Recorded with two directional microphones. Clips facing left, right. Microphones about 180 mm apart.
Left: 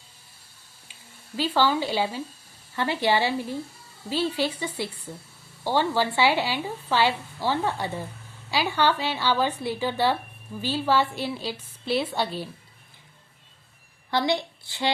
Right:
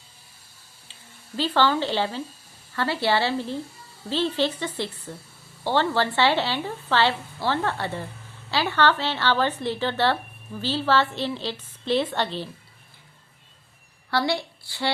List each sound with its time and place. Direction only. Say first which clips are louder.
1.4 s a woman's voice: right 1 dB; 10° left (ahead or behind)
14.1 s a woman's voice: even; 20° left (ahead or behind)